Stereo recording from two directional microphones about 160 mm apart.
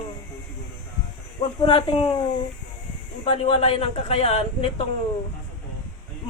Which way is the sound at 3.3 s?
35° left (ahead or behind).